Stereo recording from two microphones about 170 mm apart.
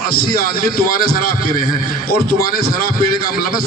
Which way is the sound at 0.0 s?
60° left (ahead or behind).